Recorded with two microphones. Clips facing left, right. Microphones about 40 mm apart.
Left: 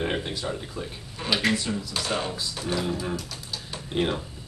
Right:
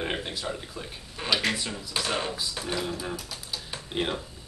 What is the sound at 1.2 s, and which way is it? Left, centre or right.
Speech, centre.